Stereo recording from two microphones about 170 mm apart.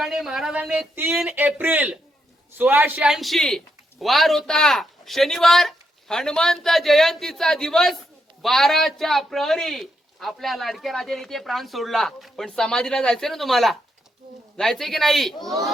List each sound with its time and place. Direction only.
0.0 s a man's voice: 5° right (ahead or behind)